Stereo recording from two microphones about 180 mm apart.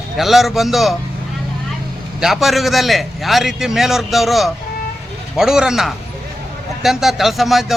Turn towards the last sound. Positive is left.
turn(degrees=0)  # may be behind; listen again after turning